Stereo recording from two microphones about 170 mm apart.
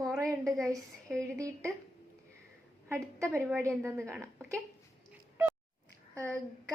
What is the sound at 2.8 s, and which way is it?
A woman's voice, 15° right (ahead or behind).